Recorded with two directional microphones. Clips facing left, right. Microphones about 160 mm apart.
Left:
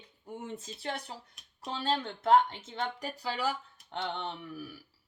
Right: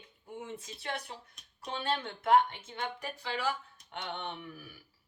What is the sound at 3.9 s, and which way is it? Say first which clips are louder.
Speech: left 4 dB; 25° left (ahead or behind).